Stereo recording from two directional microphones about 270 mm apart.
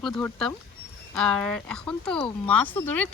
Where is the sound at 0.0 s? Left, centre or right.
Centre.